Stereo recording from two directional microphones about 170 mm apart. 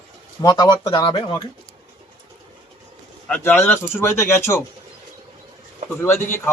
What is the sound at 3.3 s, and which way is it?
A man's voice, 10° left (ahead or behind).